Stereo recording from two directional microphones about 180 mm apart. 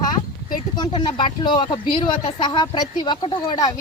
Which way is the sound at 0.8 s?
25° left (ahead or behind).